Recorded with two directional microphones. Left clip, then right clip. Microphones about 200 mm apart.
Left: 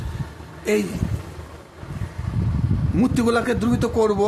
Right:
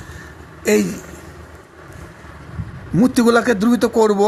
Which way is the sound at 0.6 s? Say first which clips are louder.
Right 5 dB; 25° right (ahead or behind).